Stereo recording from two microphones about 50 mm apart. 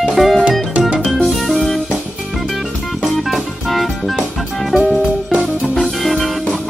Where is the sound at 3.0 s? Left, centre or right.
Centre.